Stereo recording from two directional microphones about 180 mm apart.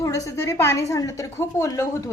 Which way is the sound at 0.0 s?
15° left (ahead or behind).